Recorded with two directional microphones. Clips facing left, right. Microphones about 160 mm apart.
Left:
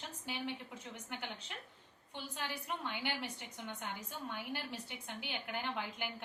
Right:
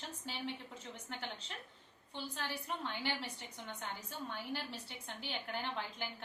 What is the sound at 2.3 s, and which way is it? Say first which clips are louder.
A woman's voice: left 1 dB; 15° left (ahead or behind).